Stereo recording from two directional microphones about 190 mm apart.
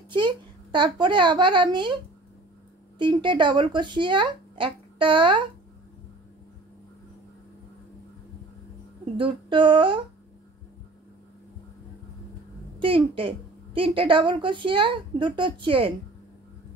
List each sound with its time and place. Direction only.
0.1 s speech: 25° right (ahead or behind)
3.0 s speech: 25° right (ahead or behind)
9.1 s speech: 25° right (ahead or behind)
12.7 s a woman's voice: 30° right (ahead or behind)